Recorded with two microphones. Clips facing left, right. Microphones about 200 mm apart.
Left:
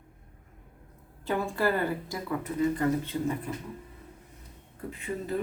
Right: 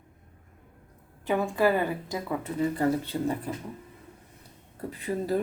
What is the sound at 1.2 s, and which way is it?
A woman's voice, 15° right (ahead or behind).